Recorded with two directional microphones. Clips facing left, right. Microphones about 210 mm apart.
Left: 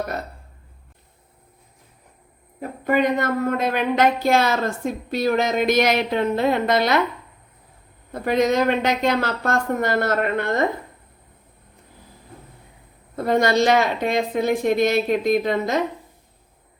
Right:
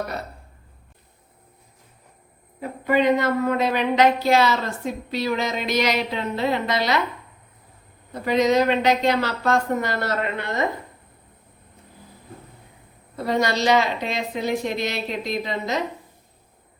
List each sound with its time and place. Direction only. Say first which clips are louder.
2.6 s a woman's voice: left 1 dB; 50° left (ahead or behind)
8.1 s a woman's voice: even; 50° left (ahead or behind)
13.1 s a woman's voice: left 4 dB; 50° left (ahead or behind)